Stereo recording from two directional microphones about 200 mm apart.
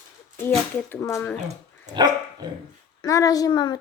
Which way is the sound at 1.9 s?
20° right (ahead or behind).